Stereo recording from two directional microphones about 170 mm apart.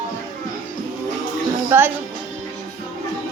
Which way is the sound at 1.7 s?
15° right (ahead or behind).